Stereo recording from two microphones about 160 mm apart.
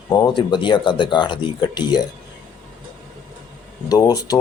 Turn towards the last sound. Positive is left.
turn(degrees=25)  # may be behind; listen again after turning